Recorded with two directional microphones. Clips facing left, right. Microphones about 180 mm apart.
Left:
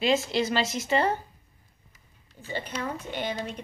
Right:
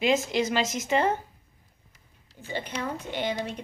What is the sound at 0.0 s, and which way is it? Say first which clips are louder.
Speech: even; 20° right (ahead or behind).